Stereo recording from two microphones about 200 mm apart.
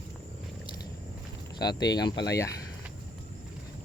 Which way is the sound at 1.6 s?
20° left (ahead or behind).